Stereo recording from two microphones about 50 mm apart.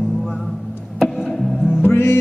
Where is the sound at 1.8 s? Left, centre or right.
Left.